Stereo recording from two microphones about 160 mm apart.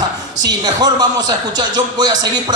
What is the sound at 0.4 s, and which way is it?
A man's voice, 25° right (ahead or behind).